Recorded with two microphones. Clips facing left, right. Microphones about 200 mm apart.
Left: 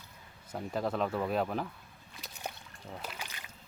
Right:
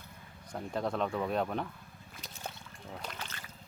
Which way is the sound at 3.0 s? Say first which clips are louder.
Even; 10° left (ahead or behind).